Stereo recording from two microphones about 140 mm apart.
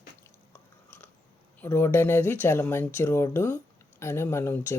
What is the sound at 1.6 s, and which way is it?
Speech, 15° left (ahead or behind).